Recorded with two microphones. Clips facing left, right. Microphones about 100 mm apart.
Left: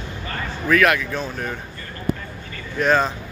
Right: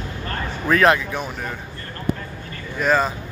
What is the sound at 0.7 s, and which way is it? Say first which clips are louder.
Speech: right 1 dB; 30° right (ahead or behind).